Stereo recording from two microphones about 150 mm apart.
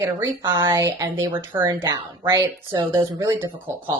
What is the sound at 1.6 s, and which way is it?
Speech, 30° right (ahead or behind).